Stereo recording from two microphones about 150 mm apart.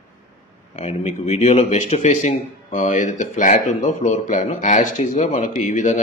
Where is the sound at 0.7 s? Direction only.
50° left (ahead or behind).